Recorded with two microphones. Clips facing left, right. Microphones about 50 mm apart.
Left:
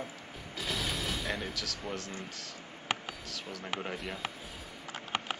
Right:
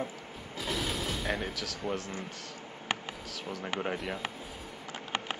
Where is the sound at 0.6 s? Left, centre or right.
Centre.